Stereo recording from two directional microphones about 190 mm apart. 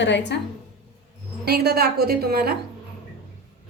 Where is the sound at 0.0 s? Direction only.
70° left (ahead or behind).